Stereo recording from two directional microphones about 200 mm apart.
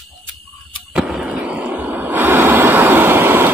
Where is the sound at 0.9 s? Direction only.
5° right (ahead or behind).